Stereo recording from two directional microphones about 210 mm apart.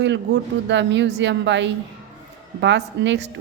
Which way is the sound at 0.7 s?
60° right (ahead or behind).